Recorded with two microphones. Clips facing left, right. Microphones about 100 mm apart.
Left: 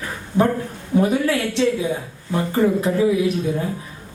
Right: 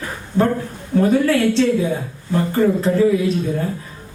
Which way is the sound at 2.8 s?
15° left (ahead or behind).